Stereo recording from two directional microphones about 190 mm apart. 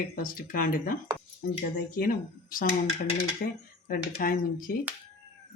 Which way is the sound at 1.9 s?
50° left (ahead or behind).